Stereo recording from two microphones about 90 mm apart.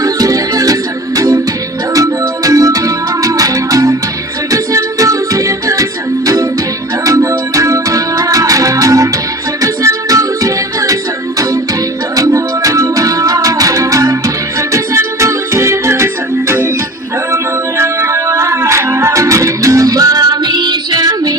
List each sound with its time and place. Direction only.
0.0 s music: 40° right (ahead or behind)
12.1 s music: 40° right (ahead or behind)
17.3 s music: 30° right (ahead or behind); by 21.3 s 45° right (ahead or behind)